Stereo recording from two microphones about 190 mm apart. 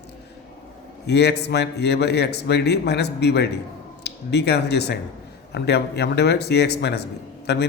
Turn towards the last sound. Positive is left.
turn(degrees=60)  # may be behind; listen again after turning